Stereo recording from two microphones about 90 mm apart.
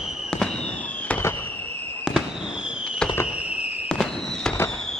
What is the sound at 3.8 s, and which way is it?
Fireworks, 5° left (ahead or behind).